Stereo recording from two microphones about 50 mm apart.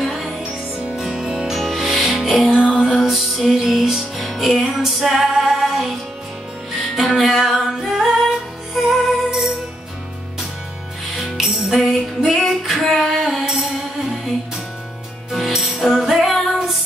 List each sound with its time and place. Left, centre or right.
0.0 s music: centre
1.1 s music: right
1.5 s music: centre
11.1 s music: centre
15.3 s music: centre